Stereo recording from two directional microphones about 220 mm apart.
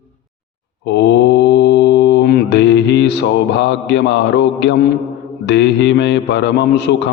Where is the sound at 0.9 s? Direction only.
50° left (ahead or behind).